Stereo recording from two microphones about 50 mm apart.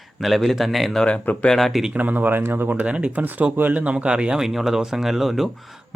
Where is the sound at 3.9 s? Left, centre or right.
Right; by 5.5 s centre.